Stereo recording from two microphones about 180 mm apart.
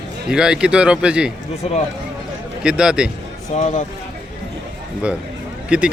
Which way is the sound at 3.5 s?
40° left (ahead or behind).